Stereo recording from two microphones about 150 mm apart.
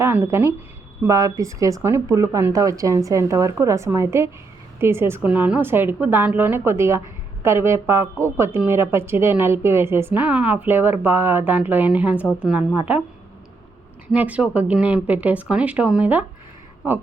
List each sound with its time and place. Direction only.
0.0 s a woman's voice: 15° right (ahead or behind)
14.1 s a woman's voice: 10° right (ahead or behind)